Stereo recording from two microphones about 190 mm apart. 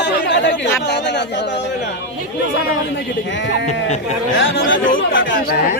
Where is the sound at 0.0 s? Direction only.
70° left (ahead or behind).